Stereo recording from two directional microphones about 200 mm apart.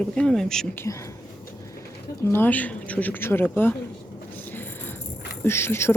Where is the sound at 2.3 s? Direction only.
10° left (ahead or behind).